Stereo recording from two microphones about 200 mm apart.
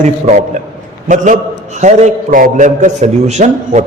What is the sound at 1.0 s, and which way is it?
A man's voice, 40° right (ahead or behind).